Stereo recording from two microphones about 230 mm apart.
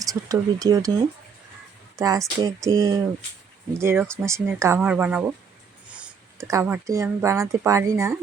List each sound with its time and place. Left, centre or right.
0.0 s speech: centre
2.0 s speech: centre